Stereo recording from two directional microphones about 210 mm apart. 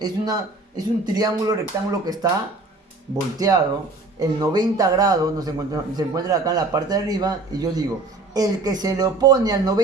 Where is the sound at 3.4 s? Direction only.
15° right (ahead or behind).